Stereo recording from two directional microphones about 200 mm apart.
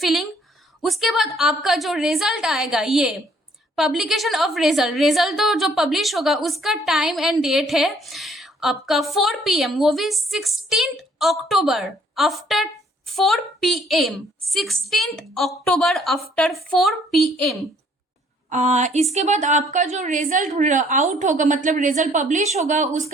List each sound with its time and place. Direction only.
0.0 s a woman's voice: centre (ahead or behind)
18.4 s a woman's voice: 35° right (ahead or behind)